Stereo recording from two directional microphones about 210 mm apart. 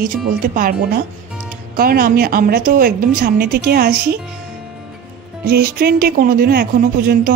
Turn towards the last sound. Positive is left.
turn(degrees=-45)  # may be behind; listen again after turning